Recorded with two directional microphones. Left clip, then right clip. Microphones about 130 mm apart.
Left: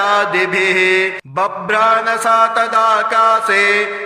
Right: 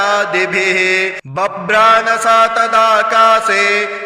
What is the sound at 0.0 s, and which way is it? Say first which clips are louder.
Mantra: even; 20° right (ahead or behind).